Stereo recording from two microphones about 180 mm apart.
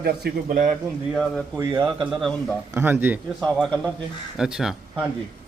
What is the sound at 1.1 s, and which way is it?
Speech, 5° left (ahead or behind).